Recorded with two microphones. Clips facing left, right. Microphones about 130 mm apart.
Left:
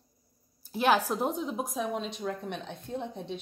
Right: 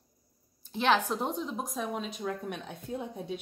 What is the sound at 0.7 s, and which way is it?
A woman's voice, 5° left (ahead or behind).